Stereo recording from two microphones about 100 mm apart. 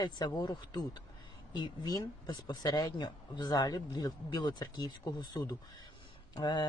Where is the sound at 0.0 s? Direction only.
45° left (ahead or behind).